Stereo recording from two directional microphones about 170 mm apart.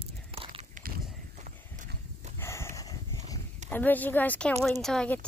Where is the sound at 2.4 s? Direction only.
15° left (ahead or behind).